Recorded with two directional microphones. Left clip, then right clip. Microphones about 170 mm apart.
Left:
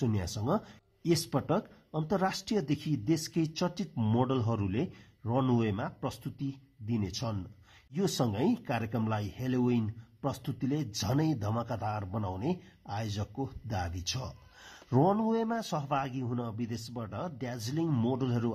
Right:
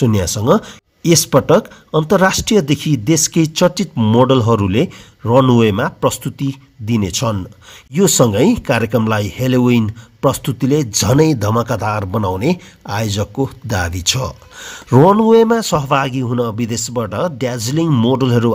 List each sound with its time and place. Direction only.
0.0 s speech: 30° right (ahead or behind)